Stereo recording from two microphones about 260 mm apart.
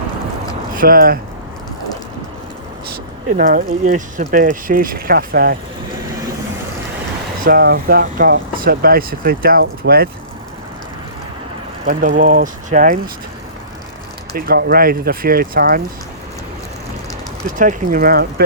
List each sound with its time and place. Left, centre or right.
0.7 s speech: right
3.3 s speech: right
7.4 s speech: right
11.9 s speech: right
14.3 s speech: right
17.6 s speech: right